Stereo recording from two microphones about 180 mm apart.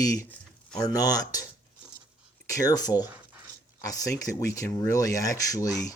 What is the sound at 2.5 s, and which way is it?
Speech, 20° left (ahead or behind).